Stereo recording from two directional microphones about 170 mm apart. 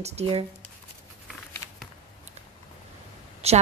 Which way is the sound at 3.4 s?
40° right (ahead or behind).